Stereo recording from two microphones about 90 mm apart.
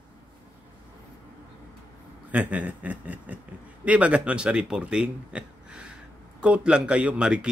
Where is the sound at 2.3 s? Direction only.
15° right (ahead or behind).